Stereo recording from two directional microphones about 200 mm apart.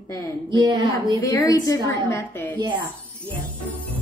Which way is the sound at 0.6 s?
20° right (ahead or behind).